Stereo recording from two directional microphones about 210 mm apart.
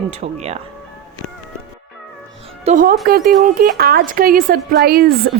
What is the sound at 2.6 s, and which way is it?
A woman's voice, 40° right (ahead or behind).